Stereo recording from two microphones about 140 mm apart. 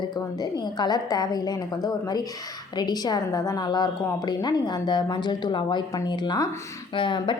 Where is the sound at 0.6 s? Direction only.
30° left (ahead or behind).